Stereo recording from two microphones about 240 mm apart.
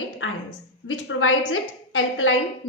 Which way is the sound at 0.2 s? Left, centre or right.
Left.